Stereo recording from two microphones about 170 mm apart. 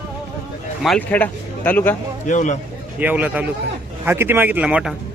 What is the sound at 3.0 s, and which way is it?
Speech, 10° right (ahead or behind).